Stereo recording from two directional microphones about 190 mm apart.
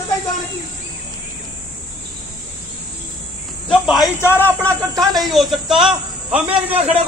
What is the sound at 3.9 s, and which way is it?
Speech, 15° left (ahead or behind).